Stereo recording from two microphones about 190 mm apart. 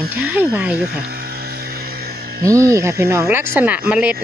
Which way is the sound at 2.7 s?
15° right (ahead or behind).